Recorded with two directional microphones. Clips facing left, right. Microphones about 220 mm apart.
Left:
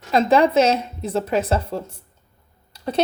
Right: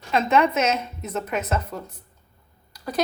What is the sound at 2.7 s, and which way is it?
Typing, 25° left (ahead or behind).